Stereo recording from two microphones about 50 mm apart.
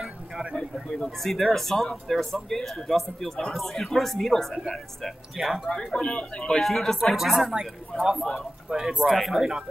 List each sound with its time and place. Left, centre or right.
1.2 s speech: centre
5.7 s speech: centre
6.6 s speech: centre
7.3 s speech: centre
7.9 s speech: centre